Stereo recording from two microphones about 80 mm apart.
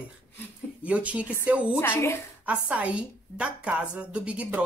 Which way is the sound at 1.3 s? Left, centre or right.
Right.